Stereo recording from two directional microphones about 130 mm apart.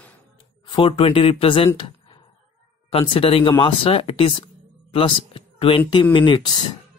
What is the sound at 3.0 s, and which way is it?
Speech, 45° left (ahead or behind).